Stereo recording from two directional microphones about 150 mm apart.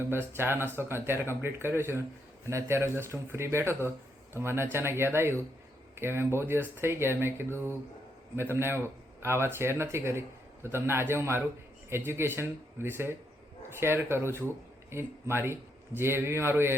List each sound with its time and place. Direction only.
0.1 s a man's voice: 15° right (ahead or behind)